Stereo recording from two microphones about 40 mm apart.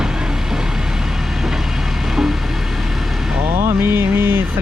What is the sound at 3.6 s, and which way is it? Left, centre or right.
Music, right.